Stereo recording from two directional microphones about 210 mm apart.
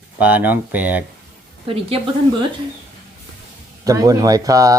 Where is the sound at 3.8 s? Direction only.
15° right (ahead or behind).